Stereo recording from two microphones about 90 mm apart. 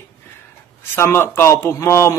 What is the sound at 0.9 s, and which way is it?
Speech, 30° left (ahead or behind).